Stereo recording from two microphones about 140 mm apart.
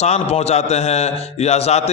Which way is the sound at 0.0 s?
50° left (ahead or behind).